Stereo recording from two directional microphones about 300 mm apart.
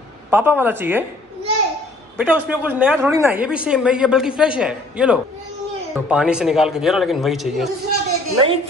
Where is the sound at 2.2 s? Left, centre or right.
Centre.